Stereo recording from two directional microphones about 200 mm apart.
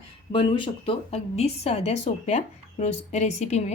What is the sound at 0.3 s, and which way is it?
Speech, 25° left (ahead or behind).